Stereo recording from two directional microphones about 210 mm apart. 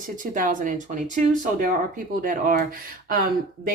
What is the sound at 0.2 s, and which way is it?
Speech, 40° right (ahead or behind).